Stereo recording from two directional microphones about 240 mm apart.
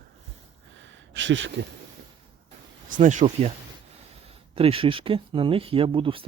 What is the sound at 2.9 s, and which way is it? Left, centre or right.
Speech, right.